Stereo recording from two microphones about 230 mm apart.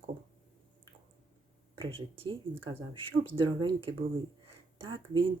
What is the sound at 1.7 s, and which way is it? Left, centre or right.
Speech, right.